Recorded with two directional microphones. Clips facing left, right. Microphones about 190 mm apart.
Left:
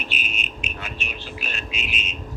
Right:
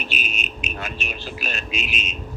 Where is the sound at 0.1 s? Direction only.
40° right (ahead or behind).